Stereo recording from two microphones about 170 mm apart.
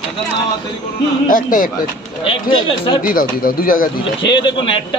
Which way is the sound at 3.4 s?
55° left (ahead or behind).